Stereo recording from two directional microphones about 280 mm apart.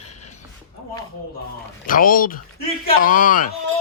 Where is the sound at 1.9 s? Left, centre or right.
Left.